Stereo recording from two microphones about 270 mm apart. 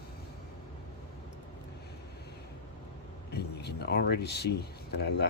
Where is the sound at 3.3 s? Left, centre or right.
Left.